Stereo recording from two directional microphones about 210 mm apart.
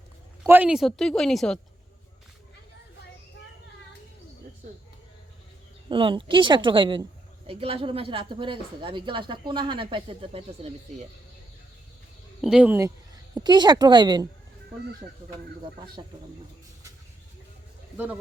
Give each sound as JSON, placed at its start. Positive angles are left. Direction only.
{"t": 0.4, "sound": "speech", "side_deg": -10}
{"t": 5.9, "sound": "a woman's voice", "side_deg": -25}
{"t": 12.4, "sound": "speech", "side_deg": -5}
{"t": 13.3, "sound": "a woman's voice", "side_deg": -20}
{"t": 16.0, "sound": "a woman's voice", "side_deg": -25}
{"t": 17.9, "sound": "speech", "side_deg": -10}